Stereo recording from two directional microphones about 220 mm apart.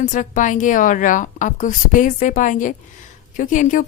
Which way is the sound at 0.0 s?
35° left (ahead or behind).